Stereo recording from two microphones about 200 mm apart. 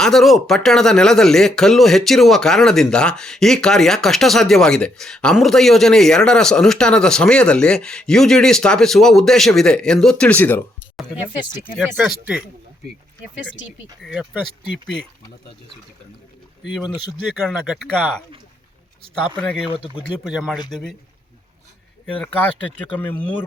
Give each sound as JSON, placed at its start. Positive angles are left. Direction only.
{"t": 0.0, "sound": "speech", "side_deg": 0}
{"t": 13.7, "sound": "speech", "side_deg": -5}
{"t": 17.4, "sound": "speech", "side_deg": 0}
{"t": 19.4, "sound": "speech", "side_deg": 0}
{"t": 19.7, "sound": "speech", "side_deg": 25}
{"t": 20.1, "sound": "speech", "side_deg": 0}
{"t": 22.0, "sound": "speech", "side_deg": 5}